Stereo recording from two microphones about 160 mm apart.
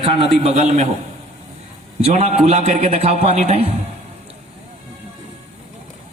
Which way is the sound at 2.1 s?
45° right (ahead or behind).